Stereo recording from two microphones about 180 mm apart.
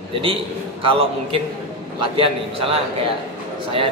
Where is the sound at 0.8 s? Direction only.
30° right (ahead or behind).